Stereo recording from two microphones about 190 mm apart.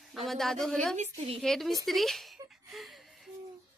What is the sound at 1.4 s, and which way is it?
Speech, centre (ahead or behind).